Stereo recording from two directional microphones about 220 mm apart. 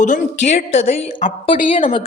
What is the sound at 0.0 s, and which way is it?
A woman's voice, 35° left (ahead or behind).